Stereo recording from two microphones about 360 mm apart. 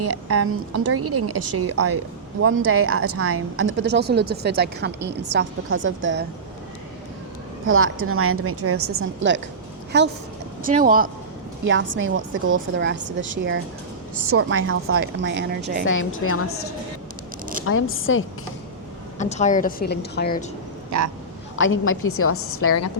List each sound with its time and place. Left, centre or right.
0.0 s a woman's voice: right
7.7 s a woman's voice: right
10.6 s a woman's voice: right
15.9 s a woman's voice: left
17.7 s a woman's voice: left
19.2 s a woman's voice: centre
21.5 s a woman's voice: left